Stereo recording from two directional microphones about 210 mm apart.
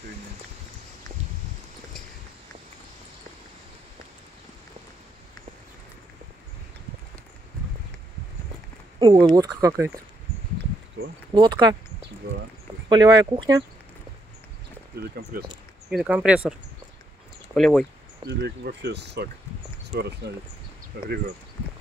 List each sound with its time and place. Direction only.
9.0 s speech: 20° right (ahead or behind)
11.3 s speech: 20° right (ahead or behind)
12.9 s speech: 20° right (ahead or behind)
15.0 s speech: 50° right (ahead or behind)
15.9 s speech: centre (ahead or behind)
17.6 s speech: centre (ahead or behind)
18.2 s speech: 50° right (ahead or behind)